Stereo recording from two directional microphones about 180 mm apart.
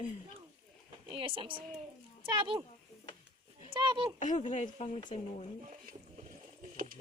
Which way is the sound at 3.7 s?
25° right (ahead or behind).